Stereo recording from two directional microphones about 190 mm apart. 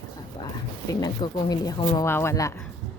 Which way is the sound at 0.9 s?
20° left (ahead or behind).